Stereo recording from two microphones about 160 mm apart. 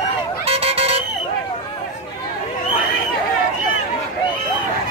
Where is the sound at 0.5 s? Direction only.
40° right (ahead or behind).